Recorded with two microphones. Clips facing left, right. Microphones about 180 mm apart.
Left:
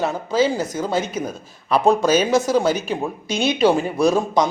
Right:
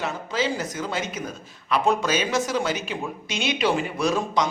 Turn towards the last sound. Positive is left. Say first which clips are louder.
# left 6 dB
turn(degrees=35)  # may be behind; listen again after turning